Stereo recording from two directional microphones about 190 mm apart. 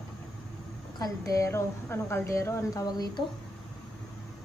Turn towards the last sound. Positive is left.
turn(degrees=20)  # may be behind; listen again after turning